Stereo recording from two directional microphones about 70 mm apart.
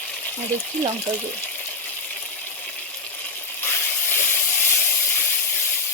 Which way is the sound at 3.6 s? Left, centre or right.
Left.